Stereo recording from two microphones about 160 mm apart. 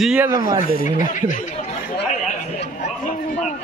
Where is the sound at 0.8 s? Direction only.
55° left (ahead or behind).